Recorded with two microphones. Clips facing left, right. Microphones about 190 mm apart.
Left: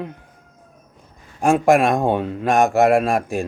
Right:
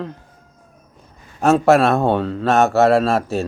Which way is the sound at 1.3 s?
15° left (ahead or behind).